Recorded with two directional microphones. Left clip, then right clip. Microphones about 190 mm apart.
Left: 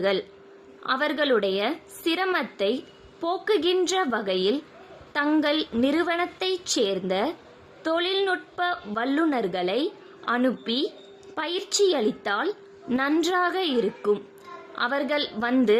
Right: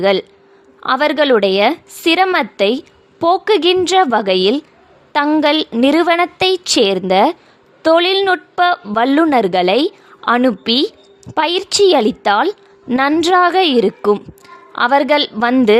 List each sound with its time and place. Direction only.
0.0 s a woman's voice: 40° right (ahead or behind)